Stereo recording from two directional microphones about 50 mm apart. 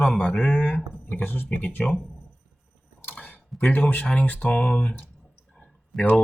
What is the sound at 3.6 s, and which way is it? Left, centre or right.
Speech, left.